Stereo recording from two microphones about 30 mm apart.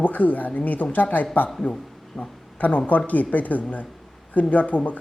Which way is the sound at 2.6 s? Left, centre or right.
Left.